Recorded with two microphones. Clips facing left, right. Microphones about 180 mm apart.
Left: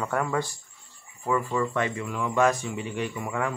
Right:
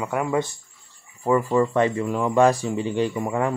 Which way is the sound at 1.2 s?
35° right (ahead or behind).